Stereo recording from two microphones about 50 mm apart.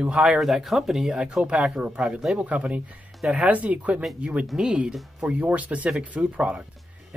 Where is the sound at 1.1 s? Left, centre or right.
Centre.